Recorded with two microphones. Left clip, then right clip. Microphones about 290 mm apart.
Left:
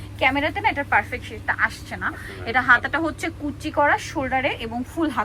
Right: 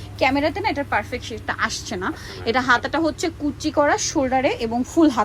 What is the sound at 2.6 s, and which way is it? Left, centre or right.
A woman's voice, centre.